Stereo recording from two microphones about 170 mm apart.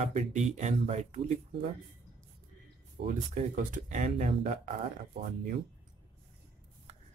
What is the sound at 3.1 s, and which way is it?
Speech, 50° right (ahead or behind).